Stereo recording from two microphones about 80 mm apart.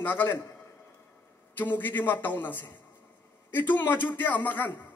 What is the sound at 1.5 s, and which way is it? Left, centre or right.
A man's voice, left.